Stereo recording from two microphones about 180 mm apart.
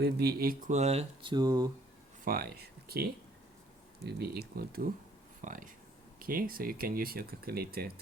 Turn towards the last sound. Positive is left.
turn(degrees=-60)  # may be behind; listen again after turning